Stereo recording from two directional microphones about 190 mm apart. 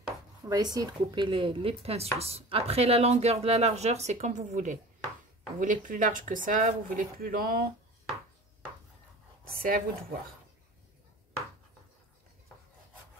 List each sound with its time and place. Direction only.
0.5 s speech: 20° right (ahead or behind); by 7.6 s 50° right (ahead or behind)
9.6 s speech: 50° right (ahead or behind)